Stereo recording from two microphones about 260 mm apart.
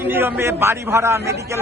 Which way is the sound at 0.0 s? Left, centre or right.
Centre.